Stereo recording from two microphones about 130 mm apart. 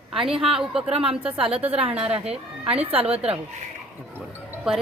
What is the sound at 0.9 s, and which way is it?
Speech, 45° right (ahead or behind).